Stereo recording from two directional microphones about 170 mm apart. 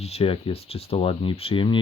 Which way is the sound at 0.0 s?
35° left (ahead or behind).